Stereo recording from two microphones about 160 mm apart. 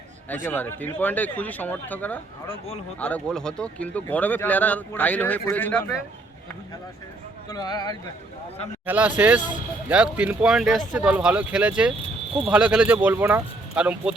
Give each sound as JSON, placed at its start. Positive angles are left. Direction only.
{"t": 0.4, "sound": "speech", "side_deg": 10}
{"t": 7.5, "sound": "speech", "side_deg": 25}
{"t": 8.9, "sound": "speech", "side_deg": -10}